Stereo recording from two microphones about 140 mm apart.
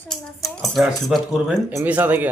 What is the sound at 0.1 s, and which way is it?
Speech, centre (ahead or behind).